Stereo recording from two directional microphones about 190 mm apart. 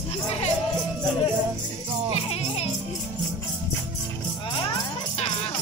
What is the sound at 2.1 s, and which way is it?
Music, 35° left (ahead or behind).